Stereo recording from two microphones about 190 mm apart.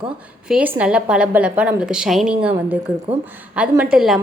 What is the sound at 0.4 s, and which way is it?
A woman's voice, 5° right (ahead or behind).